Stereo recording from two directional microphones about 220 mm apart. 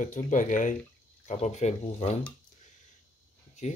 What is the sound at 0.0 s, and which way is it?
Speech, 35° left (ahead or behind).